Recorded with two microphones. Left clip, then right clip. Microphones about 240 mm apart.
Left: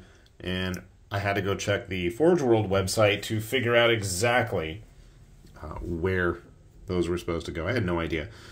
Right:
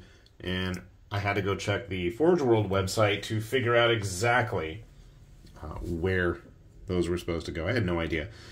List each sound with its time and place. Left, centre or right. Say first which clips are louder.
0.0 s speech: left 1 dB; centre
5.6 s speech: left 2 dB; centre